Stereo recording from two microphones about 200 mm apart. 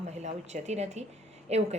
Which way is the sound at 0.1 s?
35° right (ahead or behind).